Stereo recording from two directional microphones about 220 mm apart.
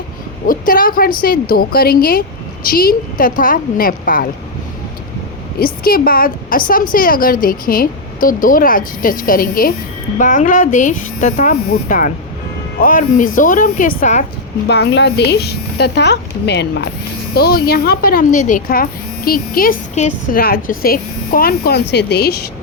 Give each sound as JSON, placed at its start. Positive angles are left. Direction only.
{"t": 0.4, "sound": "a woman's voice", "side_deg": 40}
{"t": 5.5, "sound": "a woman's voice", "side_deg": 40}
{"t": 14.7, "sound": "speech", "side_deg": 50}